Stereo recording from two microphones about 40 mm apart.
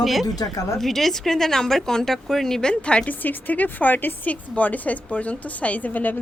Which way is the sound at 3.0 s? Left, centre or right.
Left.